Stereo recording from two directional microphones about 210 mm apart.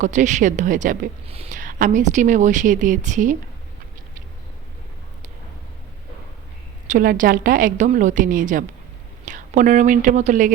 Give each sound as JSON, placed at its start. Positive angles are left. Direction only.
{"t": 0.0, "sound": "a woman's voice", "side_deg": -35}
{"t": 6.8, "sound": "a woman's voice", "side_deg": -40}